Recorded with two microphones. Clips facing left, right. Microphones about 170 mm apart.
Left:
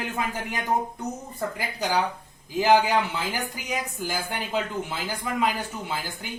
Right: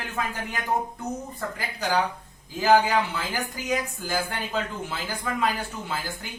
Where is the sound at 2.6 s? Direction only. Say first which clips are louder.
Even; 15° left (ahead or behind).